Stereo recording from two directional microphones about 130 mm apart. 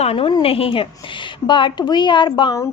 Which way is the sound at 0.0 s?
50° left (ahead or behind).